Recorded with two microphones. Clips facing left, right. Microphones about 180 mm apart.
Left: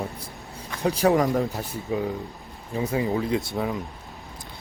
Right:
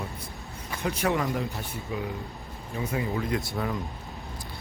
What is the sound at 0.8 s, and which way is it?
Speech, 35° left (ahead or behind).